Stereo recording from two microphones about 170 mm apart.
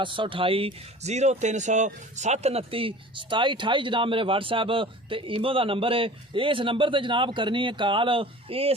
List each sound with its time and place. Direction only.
0.0 s speech: 30° right (ahead or behind)